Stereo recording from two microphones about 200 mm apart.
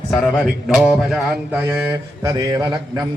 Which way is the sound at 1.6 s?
10° right (ahead or behind).